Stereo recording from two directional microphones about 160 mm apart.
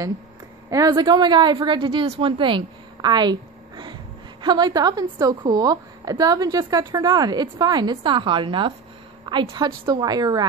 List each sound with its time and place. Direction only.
0.7 s a woman's voice: 25° right (ahead or behind)